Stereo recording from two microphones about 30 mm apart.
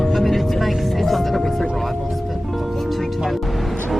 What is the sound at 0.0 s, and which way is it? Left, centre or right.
Music, centre.